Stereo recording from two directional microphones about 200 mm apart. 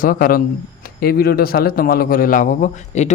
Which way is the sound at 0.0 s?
45° left (ahead or behind).